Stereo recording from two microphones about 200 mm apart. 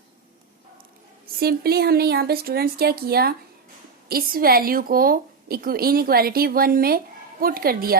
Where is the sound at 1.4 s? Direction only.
50° right (ahead or behind).